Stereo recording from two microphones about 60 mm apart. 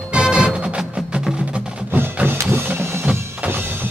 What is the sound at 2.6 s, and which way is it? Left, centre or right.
Printer, right.